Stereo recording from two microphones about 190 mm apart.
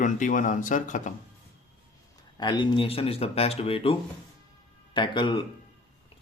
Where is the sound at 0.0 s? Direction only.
40° left (ahead or behind).